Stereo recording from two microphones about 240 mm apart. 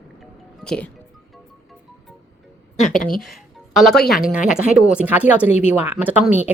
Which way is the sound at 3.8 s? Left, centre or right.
Centre.